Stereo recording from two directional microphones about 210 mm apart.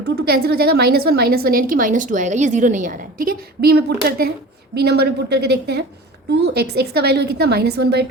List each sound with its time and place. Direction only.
0.0 s a woman's voice: 50° right (ahead or behind)